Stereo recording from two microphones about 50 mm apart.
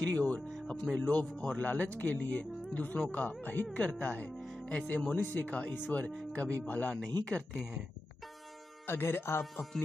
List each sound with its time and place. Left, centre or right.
0.1 s speech: left
1.6 s speech: left
3.7 s speech: left
8.8 s speech: left
9.4 s speech: centre